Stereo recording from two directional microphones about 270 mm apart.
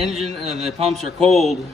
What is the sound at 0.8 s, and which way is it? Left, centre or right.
Speech, right.